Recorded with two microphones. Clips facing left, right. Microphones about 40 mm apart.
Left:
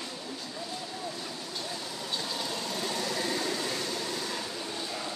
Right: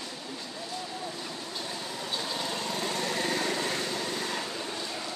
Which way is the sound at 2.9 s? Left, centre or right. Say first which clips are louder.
Right 1 dB; right.